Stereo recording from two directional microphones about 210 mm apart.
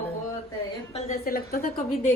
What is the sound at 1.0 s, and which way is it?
Speech, 30° left (ahead or behind).